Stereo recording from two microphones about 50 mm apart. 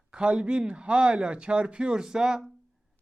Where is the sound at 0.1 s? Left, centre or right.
Centre.